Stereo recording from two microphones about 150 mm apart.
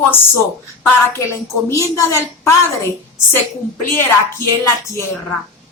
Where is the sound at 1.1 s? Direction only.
20° left (ahead or behind).